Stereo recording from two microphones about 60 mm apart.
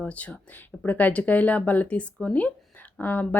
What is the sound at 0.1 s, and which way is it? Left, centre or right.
Speech, left.